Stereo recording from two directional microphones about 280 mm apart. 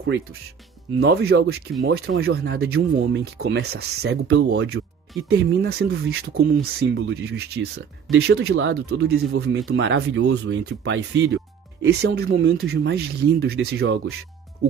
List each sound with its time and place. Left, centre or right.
1.0 s speech: right